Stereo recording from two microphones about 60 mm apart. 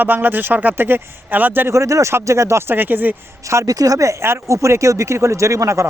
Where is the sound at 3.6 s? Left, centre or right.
Right.